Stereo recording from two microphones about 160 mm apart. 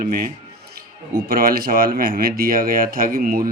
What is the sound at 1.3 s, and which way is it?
Speech, 65° right (ahead or behind).